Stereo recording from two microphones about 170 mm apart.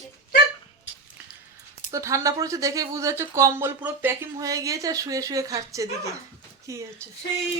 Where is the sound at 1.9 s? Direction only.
20° right (ahead or behind).